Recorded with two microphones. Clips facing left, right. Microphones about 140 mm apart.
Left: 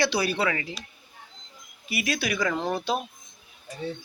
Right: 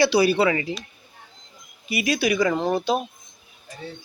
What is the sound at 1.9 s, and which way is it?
Speech, centre (ahead or behind).